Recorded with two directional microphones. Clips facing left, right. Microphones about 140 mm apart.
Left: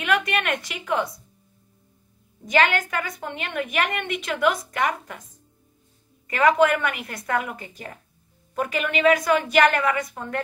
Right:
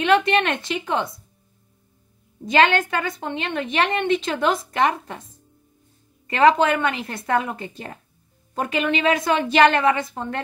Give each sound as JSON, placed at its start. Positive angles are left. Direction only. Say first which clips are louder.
{"t": 0.0, "sound": "a woman's voice", "louder": "right 6 dB", "side_deg": -30}
{"t": 2.4, "sound": "a woman's voice", "louder": "right 3 dB", "side_deg": -30}
{"t": 6.2, "sound": "a woman's voice", "louder": "right 2 dB", "side_deg": -25}